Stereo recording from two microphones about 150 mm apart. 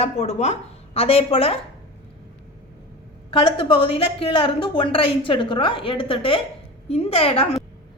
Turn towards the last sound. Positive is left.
turn(degrees=40)  # may be behind; listen again after turning